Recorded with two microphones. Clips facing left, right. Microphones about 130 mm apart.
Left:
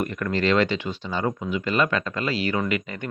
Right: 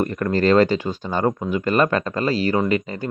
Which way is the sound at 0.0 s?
35° right (ahead or behind).